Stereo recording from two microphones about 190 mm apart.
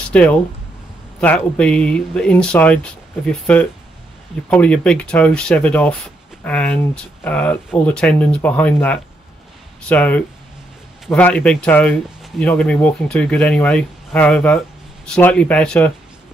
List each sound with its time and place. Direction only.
0.1 s speech: 5° left (ahead or behind)